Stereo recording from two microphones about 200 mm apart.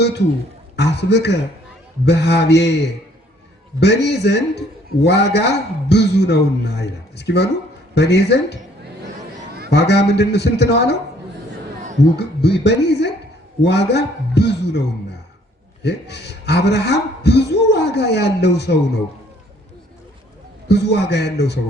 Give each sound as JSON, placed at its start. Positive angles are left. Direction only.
{"t": 0.8, "sound": "a man's voice", "side_deg": 55}
{"t": 3.8, "sound": "a man's voice", "side_deg": 55}
{"t": 9.6, "sound": "a man's voice", "side_deg": 55}
{"t": 12.1, "sound": "a man's voice", "side_deg": 55}
{"t": 15.8, "sound": "a man's voice", "side_deg": 55}
{"t": 20.7, "sound": "a man's voice", "side_deg": 55}